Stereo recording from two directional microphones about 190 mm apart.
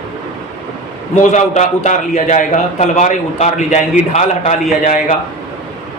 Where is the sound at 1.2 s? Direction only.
40° left (ahead or behind).